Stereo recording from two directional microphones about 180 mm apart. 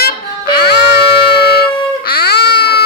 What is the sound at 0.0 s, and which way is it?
Music, 60° left (ahead or behind).